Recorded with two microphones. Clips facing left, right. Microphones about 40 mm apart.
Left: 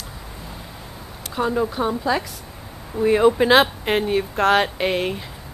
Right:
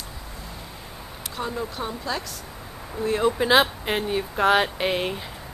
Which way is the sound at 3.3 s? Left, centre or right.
Centre.